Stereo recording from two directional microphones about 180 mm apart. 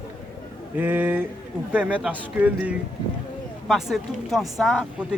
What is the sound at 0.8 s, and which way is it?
A man's voice, 10° right (ahead or behind).